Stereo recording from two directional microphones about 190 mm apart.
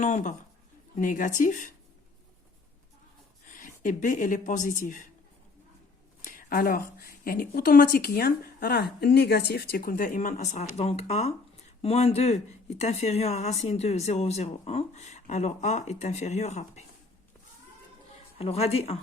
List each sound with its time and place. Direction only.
0.0 s a woman's voice: 40° left (ahead or behind)
3.4 s a woman's voice: 45° left (ahead or behind)
6.2 s a woman's voice: 45° left (ahead or behind)
18.3 s speech: 30° left (ahead or behind)